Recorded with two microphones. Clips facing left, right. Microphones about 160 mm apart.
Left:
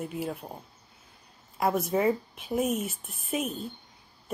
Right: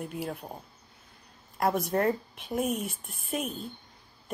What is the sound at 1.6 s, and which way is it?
A woman's voice, centre (ahead or behind).